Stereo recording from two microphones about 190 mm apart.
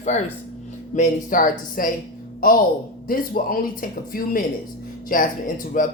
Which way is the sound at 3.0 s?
50° left (ahead or behind).